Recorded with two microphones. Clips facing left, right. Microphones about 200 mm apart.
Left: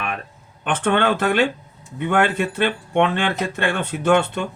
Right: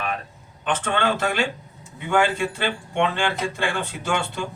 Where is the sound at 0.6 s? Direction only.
60° left (ahead or behind).